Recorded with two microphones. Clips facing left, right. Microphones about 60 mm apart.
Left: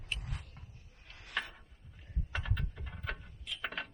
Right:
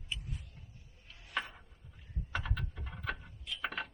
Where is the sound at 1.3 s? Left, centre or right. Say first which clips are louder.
Even; centre.